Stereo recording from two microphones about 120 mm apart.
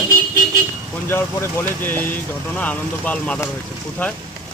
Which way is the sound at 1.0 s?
20° left (ahead or behind).